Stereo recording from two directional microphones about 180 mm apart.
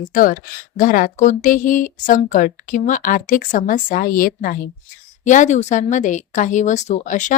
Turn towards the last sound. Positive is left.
turn(degrees=45)  # may be behind; listen again after turning